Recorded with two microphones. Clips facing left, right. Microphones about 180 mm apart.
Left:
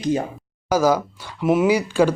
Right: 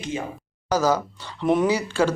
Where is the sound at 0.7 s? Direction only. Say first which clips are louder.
Left 3 dB; 10° left (ahead or behind).